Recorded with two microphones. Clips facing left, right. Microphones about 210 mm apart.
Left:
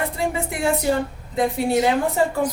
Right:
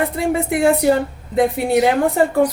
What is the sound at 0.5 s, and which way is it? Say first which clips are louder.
Speech: right 8 dB; 60° right (ahead or behind).